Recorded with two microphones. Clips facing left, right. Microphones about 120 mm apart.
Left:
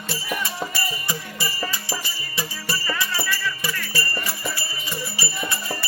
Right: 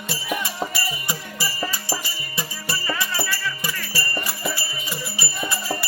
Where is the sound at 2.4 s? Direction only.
20° right (ahead or behind).